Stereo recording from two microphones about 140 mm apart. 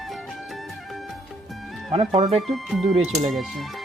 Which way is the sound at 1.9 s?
40° right (ahead or behind).